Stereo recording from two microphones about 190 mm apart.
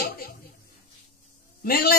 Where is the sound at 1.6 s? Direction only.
55° left (ahead or behind).